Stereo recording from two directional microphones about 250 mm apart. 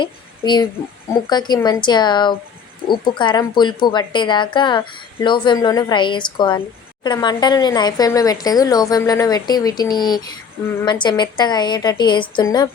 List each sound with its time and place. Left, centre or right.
0.0 s a child's voice: centre